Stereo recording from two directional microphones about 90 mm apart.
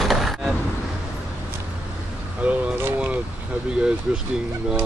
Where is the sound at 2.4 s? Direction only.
15° right (ahead or behind).